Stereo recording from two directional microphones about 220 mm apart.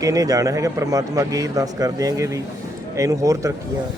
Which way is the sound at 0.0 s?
15° right (ahead or behind).